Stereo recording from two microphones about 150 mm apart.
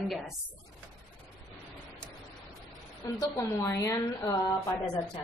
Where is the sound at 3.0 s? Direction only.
25° left (ahead or behind).